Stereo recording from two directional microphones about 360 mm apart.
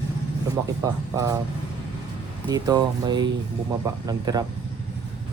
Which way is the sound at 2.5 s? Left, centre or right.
Centre.